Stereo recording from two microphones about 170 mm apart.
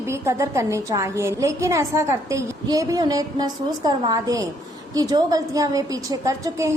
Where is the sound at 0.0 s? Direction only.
15° right (ahead or behind).